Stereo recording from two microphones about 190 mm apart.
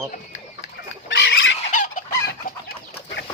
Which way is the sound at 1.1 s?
75° left (ahead or behind).